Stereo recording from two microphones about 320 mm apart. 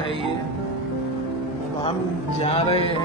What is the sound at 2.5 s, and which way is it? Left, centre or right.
Speech, centre.